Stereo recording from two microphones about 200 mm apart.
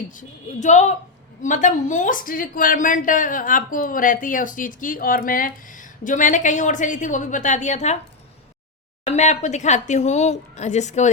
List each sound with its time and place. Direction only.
0.1 s a woman's voice: 40° left (ahead or behind)
9.0 s a woman's voice: 35° left (ahead or behind)